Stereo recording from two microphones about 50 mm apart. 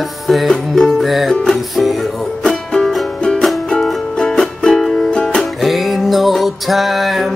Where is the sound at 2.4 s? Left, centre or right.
Centre.